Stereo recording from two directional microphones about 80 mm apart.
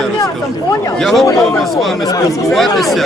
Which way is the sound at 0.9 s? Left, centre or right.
Centre.